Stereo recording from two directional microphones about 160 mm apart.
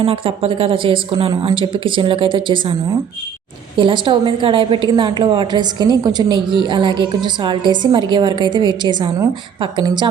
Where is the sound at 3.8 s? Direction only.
30° right (ahead or behind).